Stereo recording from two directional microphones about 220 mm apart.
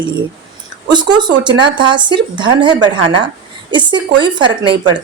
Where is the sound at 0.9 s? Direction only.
20° right (ahead or behind).